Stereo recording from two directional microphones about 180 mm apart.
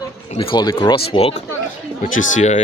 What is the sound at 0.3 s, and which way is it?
Speech, 25° left (ahead or behind).